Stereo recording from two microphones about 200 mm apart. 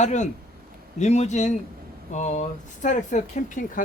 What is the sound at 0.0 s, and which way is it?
Speech, 35° left (ahead or behind).